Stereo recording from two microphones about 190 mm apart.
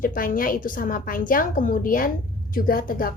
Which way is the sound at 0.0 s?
45° left (ahead or behind).